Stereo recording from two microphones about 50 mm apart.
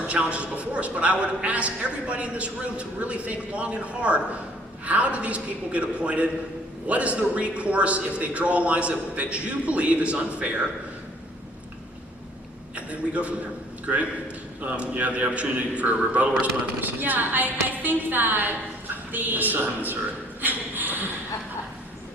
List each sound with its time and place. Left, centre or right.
0.1 s a man's voice: right
12.7 s a man's voice: right
16.8 s music: right
20.4 s a sound: right